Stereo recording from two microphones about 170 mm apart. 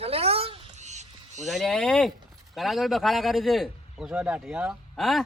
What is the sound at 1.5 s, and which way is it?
Speech, centre (ahead or behind).